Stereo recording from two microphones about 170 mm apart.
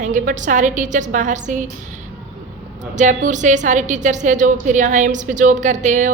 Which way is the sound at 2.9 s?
45° right (ahead or behind).